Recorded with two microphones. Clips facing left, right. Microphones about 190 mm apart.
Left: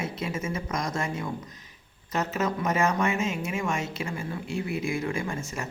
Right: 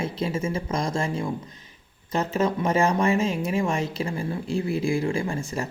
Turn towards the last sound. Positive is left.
turn(degrees=-30)  # may be behind; listen again after turning